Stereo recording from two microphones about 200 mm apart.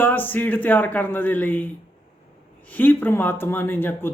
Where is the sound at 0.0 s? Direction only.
10° left (ahead or behind).